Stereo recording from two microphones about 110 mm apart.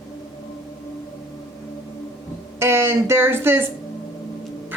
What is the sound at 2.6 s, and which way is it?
A woman's voice, 20° right (ahead or behind).